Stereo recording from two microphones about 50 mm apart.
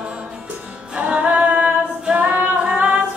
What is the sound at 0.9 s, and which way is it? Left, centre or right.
Female singing, right.